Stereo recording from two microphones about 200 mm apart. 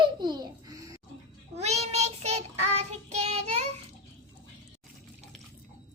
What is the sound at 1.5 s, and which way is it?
Child singing, 30° right (ahead or behind).